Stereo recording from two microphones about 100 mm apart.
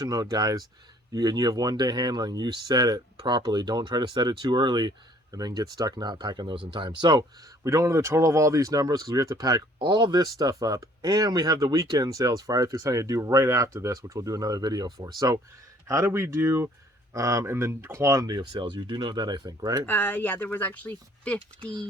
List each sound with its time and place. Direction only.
0.0 s speech: 40° right (ahead or behind)
7.6 s speech: 30° right (ahead or behind)
9.7 s speech: 50° right (ahead or behind)
15.9 s speech: 30° right (ahead or behind)
18.5 s speech: 50° right (ahead or behind)
19.8 s speech: 20° left (ahead or behind)
21.6 s speech: 55° right (ahead or behind)